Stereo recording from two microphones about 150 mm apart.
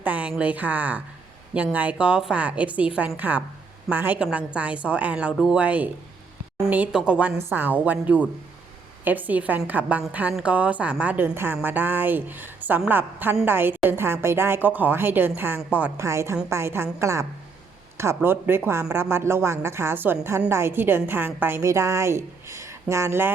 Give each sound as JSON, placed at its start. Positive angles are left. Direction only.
{"t": 0.0, "sound": "a woman's voice", "side_deg": -10}